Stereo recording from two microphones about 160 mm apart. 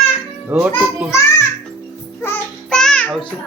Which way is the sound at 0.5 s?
10° right (ahead or behind).